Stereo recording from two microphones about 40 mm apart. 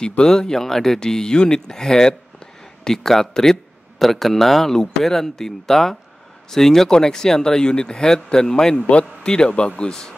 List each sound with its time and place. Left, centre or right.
0.2 s speech: centre